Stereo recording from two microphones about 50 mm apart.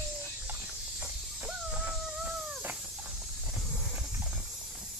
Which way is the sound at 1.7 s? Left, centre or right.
Centre.